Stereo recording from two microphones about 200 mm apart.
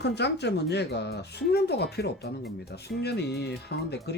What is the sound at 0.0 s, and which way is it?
Speech, 55° left (ahead or behind).